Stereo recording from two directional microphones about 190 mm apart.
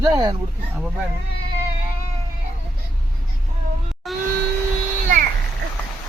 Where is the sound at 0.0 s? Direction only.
20° right (ahead or behind).